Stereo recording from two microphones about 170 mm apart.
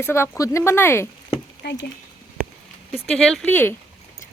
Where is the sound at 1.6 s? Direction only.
80° left.